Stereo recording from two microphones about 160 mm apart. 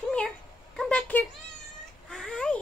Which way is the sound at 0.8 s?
5° left (ahead or behind).